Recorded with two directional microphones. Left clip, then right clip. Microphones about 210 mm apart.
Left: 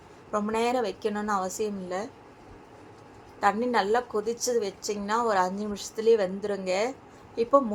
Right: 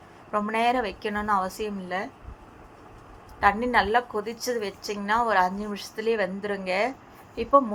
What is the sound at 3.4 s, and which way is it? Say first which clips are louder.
A woman's voice: right 3 dB; 5° right (ahead or behind).